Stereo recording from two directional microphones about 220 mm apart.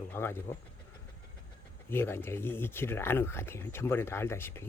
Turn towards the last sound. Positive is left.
turn(degrees=10)  # may be behind; listen again after turning